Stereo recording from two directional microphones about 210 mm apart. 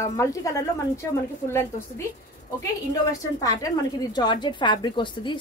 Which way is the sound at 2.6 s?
15° left (ahead or behind).